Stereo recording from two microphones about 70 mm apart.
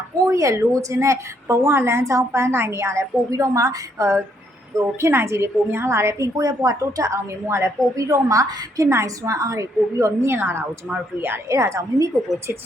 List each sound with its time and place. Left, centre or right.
0.2 s a woman's voice: right
8.9 s a woman's voice: right